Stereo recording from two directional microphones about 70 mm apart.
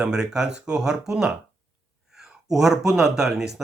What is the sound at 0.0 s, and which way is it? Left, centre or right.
Speech, centre.